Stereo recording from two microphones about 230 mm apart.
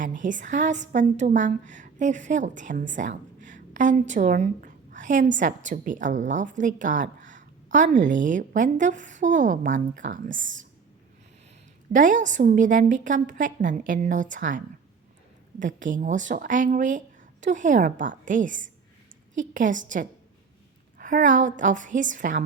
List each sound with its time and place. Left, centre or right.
0.0 s a woman's voice: right
11.9 s a woman's voice: right